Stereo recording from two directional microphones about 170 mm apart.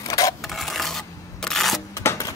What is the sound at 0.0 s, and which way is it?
Sewing machine, 20° left (ahead or behind).